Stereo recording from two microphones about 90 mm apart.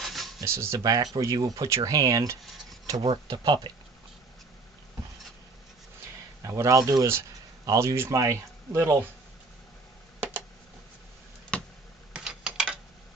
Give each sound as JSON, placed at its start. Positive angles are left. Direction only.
{"t": 0.0, "sound": "a sound", "side_deg": 0}
{"t": 0.4, "sound": "speech", "side_deg": -30}
{"t": 0.8, "sound": "speech", "side_deg": -45}
{"t": 3.0, "sound": "speech", "side_deg": -65}
{"t": 6.4, "sound": "speech", "side_deg": -35}
{"t": 11.5, "sound": "basketball bounce", "side_deg": 10}
{"t": 12.1, "sound": "a sound", "side_deg": -10}